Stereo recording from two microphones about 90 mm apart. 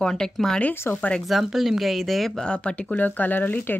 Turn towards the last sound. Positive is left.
turn(degrees=20)  # may be behind; listen again after turning